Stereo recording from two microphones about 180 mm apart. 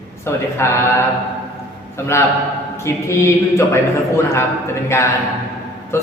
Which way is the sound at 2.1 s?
15° left (ahead or behind).